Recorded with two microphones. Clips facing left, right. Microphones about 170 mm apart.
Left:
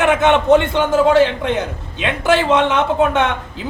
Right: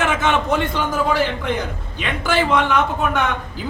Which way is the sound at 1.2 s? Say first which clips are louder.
Left 6 dB; 80° left.